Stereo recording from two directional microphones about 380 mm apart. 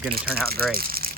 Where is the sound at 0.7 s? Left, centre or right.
Right.